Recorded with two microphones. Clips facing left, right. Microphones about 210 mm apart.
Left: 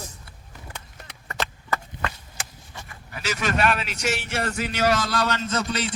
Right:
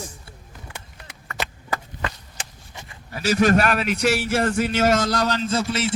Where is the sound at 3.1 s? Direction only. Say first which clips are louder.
Right 9 dB; 35° right (ahead or behind).